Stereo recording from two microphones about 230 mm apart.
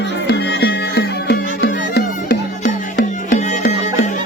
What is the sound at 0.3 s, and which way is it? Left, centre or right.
Music, left.